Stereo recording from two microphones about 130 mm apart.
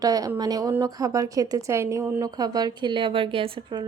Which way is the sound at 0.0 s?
30° right (ahead or behind).